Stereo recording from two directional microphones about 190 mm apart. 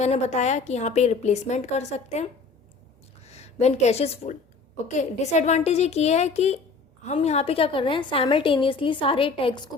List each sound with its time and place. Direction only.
0.0 s a woman's voice: 35° left (ahead or behind)
3.2 s a woman's voice: 35° left (ahead or behind)